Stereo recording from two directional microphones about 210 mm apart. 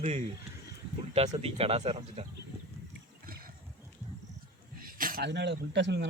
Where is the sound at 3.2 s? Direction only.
45° right (ahead or behind).